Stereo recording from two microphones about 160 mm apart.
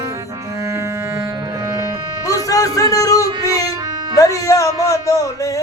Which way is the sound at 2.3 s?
20° left (ahead or behind).